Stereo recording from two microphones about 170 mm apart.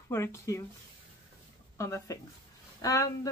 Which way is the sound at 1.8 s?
15° left (ahead or behind).